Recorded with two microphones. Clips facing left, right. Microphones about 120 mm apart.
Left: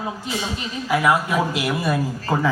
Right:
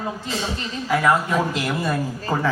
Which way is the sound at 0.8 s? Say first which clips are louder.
Even; 15° left (ahead or behind).